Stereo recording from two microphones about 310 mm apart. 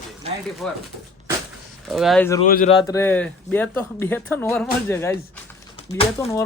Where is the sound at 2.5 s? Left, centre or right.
Left.